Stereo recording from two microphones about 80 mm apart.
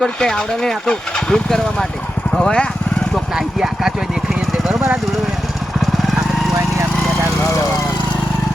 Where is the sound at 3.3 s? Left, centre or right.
Centre.